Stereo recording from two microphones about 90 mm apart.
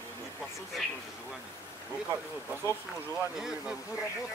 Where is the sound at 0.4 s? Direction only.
Centre (ahead or behind).